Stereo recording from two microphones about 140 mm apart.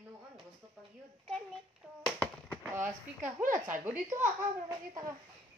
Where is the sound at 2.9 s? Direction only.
20° right (ahead or behind).